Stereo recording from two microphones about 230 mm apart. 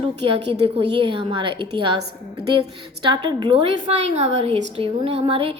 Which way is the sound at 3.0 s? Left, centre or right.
Centre.